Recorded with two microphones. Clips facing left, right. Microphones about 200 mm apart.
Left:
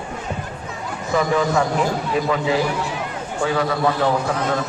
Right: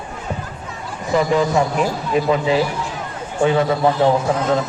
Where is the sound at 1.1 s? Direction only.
20° right (ahead or behind).